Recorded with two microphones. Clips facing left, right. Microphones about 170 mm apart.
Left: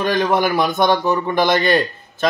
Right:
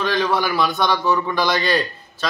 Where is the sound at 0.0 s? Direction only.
50° left (ahead or behind).